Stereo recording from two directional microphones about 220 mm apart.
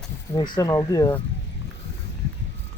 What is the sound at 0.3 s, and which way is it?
Speech, 20° left (ahead or behind).